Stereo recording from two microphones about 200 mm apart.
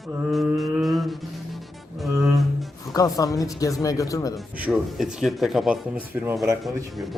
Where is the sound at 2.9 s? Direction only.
15° left (ahead or behind).